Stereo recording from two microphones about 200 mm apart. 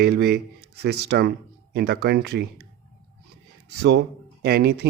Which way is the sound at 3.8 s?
55° right (ahead or behind).